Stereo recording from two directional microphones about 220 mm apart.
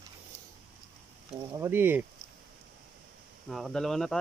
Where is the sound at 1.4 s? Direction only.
10° right (ahead or behind).